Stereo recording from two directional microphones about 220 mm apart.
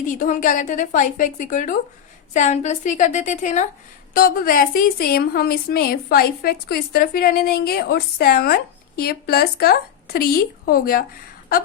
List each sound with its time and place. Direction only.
0.0 s a woman's voice: 35° left (ahead or behind)